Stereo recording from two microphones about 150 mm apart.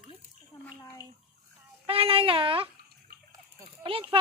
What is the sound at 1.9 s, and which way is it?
Speech, 40° right (ahead or behind).